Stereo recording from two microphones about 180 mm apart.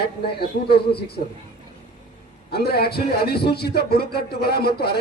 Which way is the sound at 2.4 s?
60° left (ahead or behind).